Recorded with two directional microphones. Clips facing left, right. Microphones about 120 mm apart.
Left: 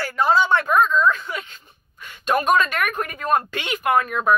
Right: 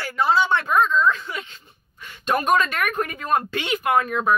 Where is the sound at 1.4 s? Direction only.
45° left (ahead or behind).